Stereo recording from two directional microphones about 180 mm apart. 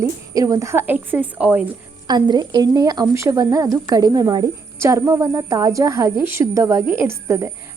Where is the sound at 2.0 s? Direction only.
25° right (ahead or behind).